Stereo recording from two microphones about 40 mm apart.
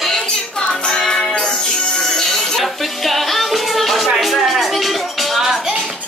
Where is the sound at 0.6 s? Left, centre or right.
Centre.